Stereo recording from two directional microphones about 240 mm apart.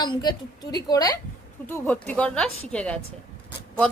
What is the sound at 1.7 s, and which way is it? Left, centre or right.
Speech, centre.